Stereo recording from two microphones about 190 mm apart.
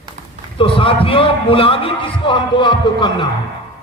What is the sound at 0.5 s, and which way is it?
A man's voice, 25° left (ahead or behind).